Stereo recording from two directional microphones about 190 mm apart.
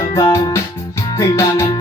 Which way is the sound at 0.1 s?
15° left (ahead or behind).